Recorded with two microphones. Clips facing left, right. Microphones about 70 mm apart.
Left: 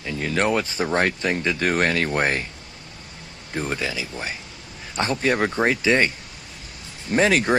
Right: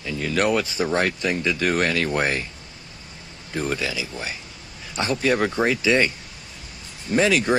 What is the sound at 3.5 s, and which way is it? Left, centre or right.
Speech, left.